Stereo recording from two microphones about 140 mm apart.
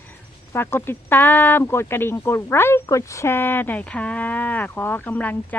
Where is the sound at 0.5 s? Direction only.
15° left (ahead or behind).